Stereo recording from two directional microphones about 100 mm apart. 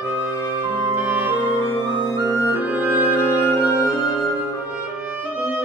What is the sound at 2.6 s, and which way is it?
Music, 15° right (ahead or behind).